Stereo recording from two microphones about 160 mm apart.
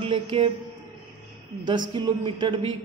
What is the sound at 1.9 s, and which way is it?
Speech, 30° right (ahead or behind).